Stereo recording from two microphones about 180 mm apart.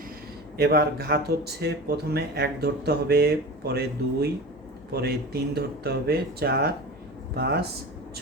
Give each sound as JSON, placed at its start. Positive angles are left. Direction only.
{"t": 0.5, "sound": "speech", "side_deg": -60}